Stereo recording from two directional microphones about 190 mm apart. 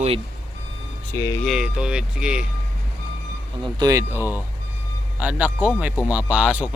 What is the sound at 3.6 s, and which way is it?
Speech, 20° right (ahead or behind).